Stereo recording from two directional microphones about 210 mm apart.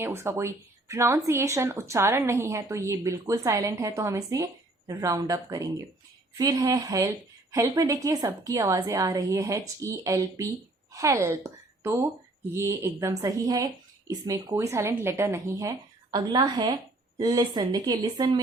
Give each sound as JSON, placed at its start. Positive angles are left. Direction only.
{"t": 0.0, "sound": "a woman's voice", "side_deg": -10}